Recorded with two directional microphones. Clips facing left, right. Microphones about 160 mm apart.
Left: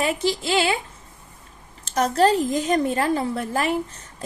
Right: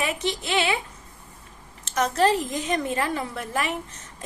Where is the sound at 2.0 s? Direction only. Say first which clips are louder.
Left 3 dB; 35° left (ahead or behind).